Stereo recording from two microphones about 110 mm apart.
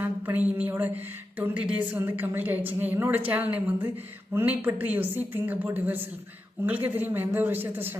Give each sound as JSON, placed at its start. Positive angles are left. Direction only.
{"t": 0.0, "sound": "a woman's voice", "side_deg": -15}